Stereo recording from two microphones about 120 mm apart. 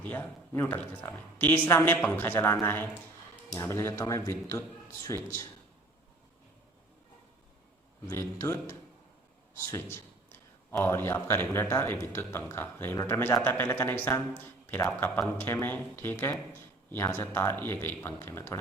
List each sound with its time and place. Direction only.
0.0 s a woman's voice: 15° left (ahead or behind); by 5.5 s 30° left (ahead or behind)
8.1 s a woman's voice: 20° left (ahead or behind)